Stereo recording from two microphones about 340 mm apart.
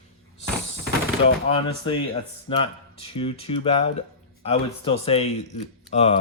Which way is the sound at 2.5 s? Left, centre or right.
Centre.